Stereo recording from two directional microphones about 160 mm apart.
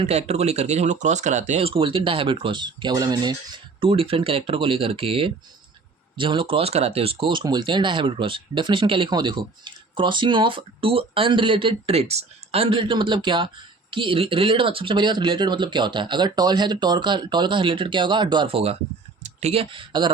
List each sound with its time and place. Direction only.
0.0 s speech: 40° right (ahead or behind)